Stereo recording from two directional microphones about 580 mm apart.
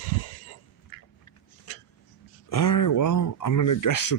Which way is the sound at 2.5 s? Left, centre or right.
Left.